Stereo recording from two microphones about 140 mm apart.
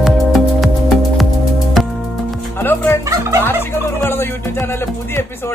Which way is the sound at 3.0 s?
20° right (ahead or behind).